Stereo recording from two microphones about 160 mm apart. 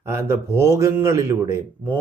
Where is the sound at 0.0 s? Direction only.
15° right (ahead or behind).